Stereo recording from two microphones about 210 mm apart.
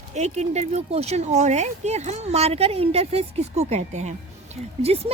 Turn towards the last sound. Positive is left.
turn(degrees=-30)  # may be behind; listen again after turning